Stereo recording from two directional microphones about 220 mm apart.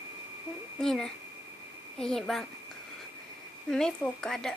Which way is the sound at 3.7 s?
5° left (ahead or behind).